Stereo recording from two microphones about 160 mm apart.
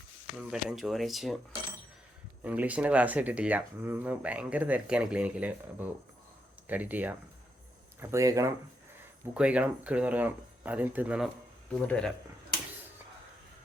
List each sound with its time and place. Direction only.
0.3 s speech: centre (ahead or behind)
2.4 s speech: 10° right (ahead or behind)
9.3 s speech: 5° right (ahead or behind)
11.7 s speech: 5° left (ahead or behind)